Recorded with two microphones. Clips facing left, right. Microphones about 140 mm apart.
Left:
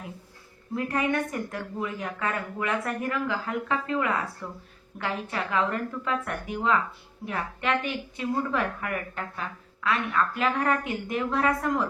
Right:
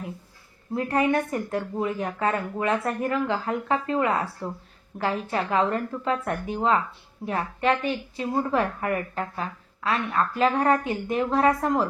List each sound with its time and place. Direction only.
0.7 s a woman's voice: 30° right (ahead or behind)